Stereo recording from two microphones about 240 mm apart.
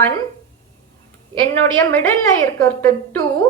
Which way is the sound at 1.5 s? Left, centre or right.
Centre.